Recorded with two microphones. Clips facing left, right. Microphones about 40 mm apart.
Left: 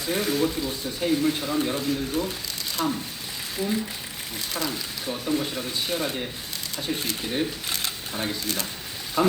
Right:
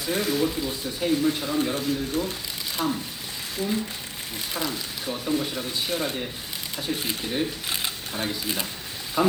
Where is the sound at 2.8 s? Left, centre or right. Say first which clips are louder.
Even; left.